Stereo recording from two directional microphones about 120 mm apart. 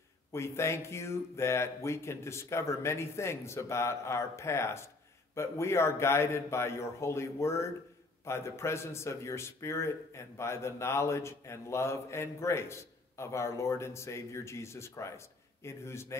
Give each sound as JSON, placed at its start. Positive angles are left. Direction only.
{"t": 0.3, "sound": "a man's voice", "side_deg": 20}